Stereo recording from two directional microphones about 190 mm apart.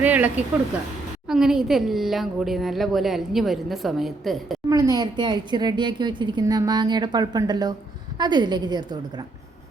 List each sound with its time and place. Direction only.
0.0 s a woman's voice: 10° right (ahead or behind)
4.7 s a woman's voice: 20° right (ahead or behind)